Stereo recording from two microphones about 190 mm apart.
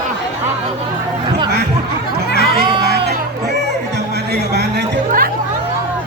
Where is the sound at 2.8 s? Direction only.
55° right (ahead or behind).